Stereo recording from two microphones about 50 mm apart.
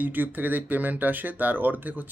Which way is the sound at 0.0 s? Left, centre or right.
Right.